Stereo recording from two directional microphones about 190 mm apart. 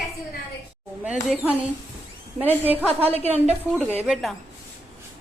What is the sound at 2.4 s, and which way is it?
Speech, 10° right (ahead or behind).